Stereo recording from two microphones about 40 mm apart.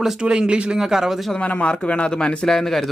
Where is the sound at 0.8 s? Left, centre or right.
Centre.